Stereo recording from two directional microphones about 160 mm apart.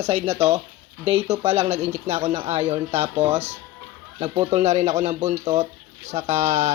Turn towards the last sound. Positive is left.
turn(degrees=-45)  # may be behind; listen again after turning